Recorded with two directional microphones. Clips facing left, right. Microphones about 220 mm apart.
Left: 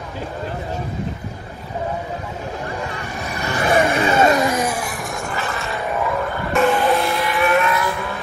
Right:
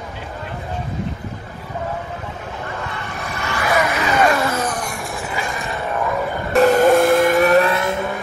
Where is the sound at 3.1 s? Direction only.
15° left (ahead or behind); by 5.7 s 15° right (ahead or behind).